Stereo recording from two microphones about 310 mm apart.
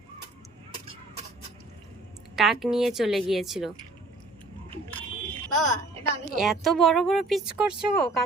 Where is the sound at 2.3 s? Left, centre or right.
Centre.